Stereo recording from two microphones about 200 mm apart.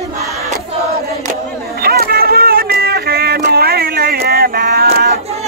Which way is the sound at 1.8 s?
50° right (ahead or behind).